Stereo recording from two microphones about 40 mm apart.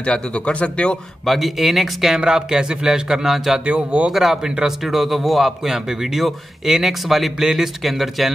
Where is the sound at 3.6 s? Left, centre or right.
Right.